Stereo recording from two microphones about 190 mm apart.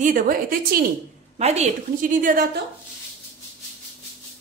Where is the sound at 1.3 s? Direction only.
35° right (ahead or behind).